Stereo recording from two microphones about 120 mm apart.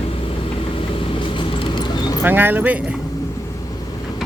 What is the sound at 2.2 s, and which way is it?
Speech, 15° right (ahead or behind).